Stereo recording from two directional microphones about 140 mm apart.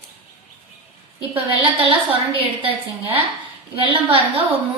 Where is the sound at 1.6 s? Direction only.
40° right (ahead or behind).